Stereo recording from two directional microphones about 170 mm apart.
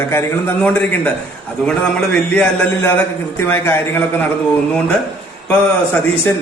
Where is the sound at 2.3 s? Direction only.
10° left (ahead or behind).